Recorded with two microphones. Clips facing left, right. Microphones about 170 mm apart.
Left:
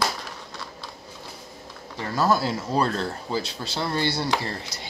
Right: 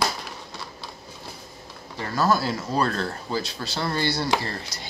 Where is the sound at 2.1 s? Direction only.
25° left (ahead or behind).